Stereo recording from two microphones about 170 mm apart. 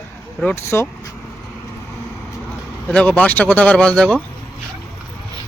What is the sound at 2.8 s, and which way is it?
Speech, 5° left (ahead or behind).